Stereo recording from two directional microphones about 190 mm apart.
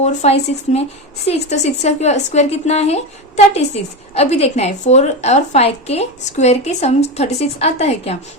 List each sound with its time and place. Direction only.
0.0 s a woman's voice: 35° left (ahead or behind)